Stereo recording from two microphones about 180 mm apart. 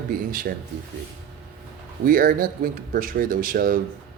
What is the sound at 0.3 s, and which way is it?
Speech, 50° right (ahead or behind).